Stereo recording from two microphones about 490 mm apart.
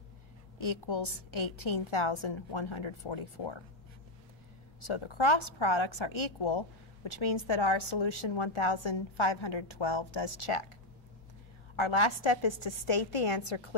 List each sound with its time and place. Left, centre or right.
0.6 s a woman's voice: left
4.7 s a woman's voice: left
11.7 s a woman's voice: left